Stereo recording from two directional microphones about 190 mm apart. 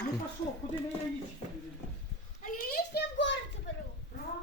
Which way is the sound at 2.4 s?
50° left (ahead or behind).